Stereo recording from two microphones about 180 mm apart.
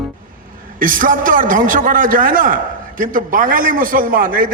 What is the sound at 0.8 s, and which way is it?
A man's voice, 50° right (ahead or behind).